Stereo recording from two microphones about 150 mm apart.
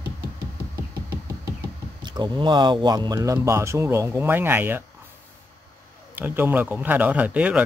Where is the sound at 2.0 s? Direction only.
30° right (ahead or behind); by 4.8 s 15° right (ahead or behind).